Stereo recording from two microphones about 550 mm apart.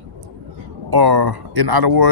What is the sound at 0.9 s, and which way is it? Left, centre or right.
A man's voice, right.